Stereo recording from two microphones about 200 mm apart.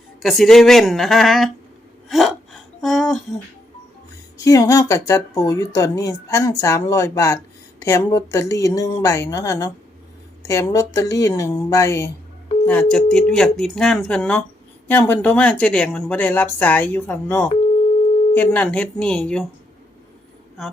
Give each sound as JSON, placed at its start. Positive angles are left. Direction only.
{"t": 0.2, "sound": "speech", "side_deg": 0}
{"t": 2.0, "sound": "gasp", "side_deg": 0}
{"t": 4.4, "sound": "a woman's voice", "side_deg": 15}
{"t": 20.6, "sound": "speech", "side_deg": 0}